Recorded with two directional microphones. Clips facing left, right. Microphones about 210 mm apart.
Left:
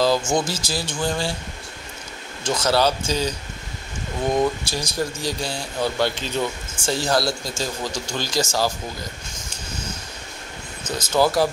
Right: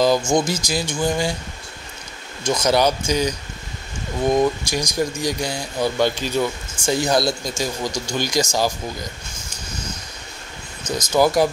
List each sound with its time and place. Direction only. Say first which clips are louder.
0.2 s speech: right 3 dB; 5° left (ahead or behind)
0.5 s speech: right 4 dB; 15° right (ahead or behind)
2.4 s speech: right 2 dB; 15° right (ahead or behind)
4.4 s speech: right 3 dB; 15° right (ahead or behind)
11.1 s speech: right 2 dB; 15° right (ahead or behind)